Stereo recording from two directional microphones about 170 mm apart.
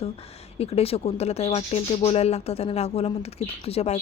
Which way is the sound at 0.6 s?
35° left (ahead or behind).